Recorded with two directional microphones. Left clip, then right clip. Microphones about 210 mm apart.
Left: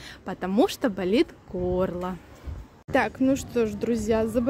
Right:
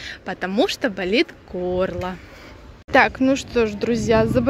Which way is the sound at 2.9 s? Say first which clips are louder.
Right 7 dB; centre (ahead or behind).